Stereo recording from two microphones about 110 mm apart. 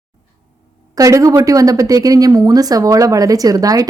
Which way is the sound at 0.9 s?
30° right (ahead or behind).